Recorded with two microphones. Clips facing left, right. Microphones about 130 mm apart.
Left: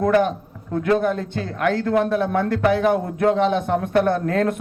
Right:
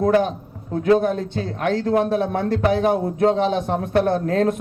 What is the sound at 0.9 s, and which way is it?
Speech, 30° right (ahead or behind).